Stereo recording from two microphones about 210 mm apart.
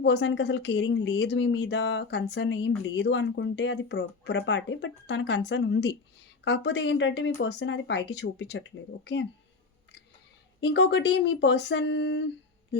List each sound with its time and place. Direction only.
0.0 s speech: 55° left (ahead or behind)
10.6 s speech: 55° left (ahead or behind)